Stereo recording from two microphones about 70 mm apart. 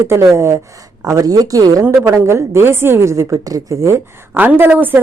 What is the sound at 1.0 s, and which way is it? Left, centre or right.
Speech, right.